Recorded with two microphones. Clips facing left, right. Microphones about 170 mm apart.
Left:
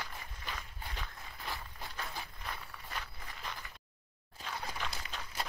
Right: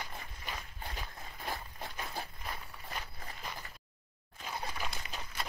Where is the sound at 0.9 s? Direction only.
40° right (ahead or behind).